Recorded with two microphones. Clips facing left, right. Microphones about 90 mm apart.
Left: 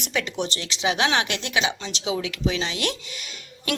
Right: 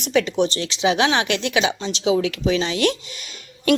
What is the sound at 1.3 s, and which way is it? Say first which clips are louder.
Speech: right 5 dB; 25° left (ahead or behind).